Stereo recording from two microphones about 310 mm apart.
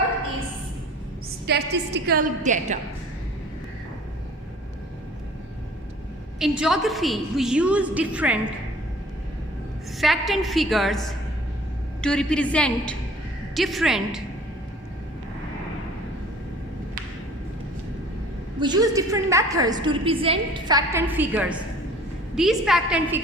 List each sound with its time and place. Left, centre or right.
1.5 s a woman's voice: right
6.6 s a woman's voice: centre
10.0 s a woman's voice: centre
12.0 s a woman's voice: centre
18.6 s a woman's voice: centre